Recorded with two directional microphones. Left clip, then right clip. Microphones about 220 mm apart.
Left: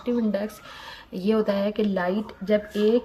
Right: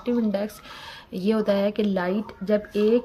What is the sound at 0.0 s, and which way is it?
A woman's voice, 20° right (ahead or behind).